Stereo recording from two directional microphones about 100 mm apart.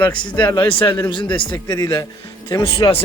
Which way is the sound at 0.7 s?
60° left (ahead or behind).